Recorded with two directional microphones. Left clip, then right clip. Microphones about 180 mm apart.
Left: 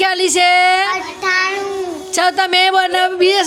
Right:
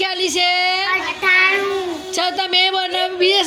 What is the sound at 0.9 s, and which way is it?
Child singing, 55° left (ahead or behind).